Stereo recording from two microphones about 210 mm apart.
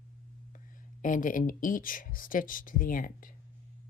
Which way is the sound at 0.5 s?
40° left (ahead or behind).